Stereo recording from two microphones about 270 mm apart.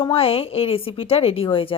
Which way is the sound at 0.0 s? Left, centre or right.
Centre.